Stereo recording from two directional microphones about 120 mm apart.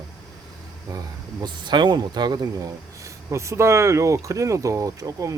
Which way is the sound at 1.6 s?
40° right (ahead or behind).